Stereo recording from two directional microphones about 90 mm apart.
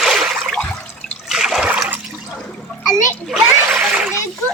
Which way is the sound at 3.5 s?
20° right (ahead or behind).